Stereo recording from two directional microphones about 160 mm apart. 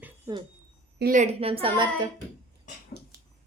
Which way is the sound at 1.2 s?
35° right (ahead or behind).